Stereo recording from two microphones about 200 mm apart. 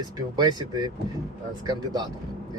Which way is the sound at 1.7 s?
20° right (ahead or behind).